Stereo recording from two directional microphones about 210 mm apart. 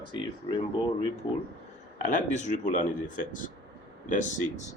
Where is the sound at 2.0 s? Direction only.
35° left (ahead or behind).